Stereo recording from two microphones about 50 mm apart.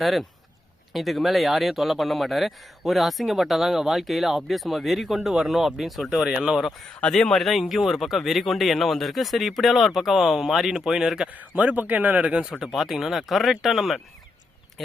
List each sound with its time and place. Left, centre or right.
0.0 s speech: centre
6.3 s speech: centre
6.6 s speech: centre
11.3 s a man's voice: right
12.5 s speech: centre